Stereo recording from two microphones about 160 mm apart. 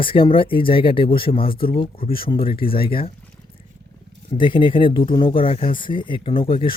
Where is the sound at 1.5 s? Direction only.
65° left (ahead or behind).